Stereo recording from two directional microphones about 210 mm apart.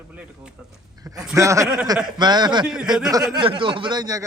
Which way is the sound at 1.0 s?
15° right (ahead or behind).